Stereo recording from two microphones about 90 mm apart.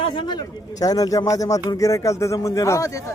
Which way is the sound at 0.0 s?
55° left (ahead or behind).